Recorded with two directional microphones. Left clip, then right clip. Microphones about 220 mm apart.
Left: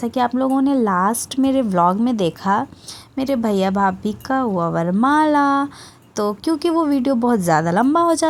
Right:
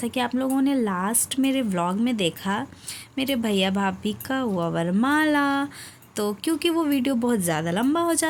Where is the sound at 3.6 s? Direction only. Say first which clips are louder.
Left 7 dB; centre (ahead or behind).